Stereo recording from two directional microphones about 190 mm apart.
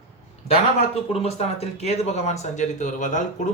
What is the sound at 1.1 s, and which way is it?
Speech, 30° left (ahead or behind).